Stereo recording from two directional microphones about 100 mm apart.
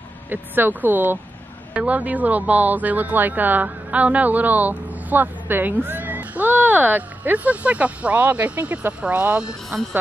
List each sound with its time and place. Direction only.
0.3 s speech: 20° right (ahead or behind)